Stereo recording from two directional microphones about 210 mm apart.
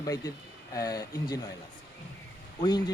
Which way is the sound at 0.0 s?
15° left (ahead or behind).